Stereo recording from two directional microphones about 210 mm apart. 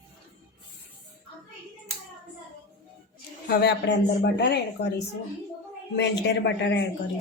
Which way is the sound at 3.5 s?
50° left (ahead or behind).